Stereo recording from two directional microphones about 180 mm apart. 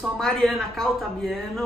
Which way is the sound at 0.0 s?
Centre (ahead or behind).